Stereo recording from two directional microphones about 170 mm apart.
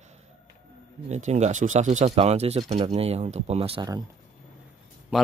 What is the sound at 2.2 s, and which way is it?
Speech, 40° right (ahead or behind).